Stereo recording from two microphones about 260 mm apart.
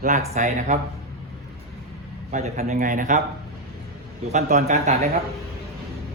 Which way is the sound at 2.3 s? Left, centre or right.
Right.